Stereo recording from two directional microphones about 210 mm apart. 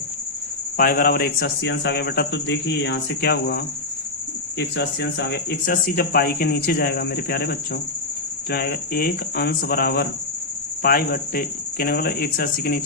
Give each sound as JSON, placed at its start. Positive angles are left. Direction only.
{"t": 0.8, "sound": "speech", "side_deg": 45}